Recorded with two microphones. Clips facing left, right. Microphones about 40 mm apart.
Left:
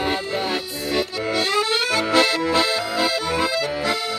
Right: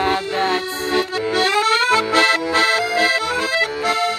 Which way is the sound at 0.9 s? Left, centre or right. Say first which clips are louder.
Right 3 dB; centre.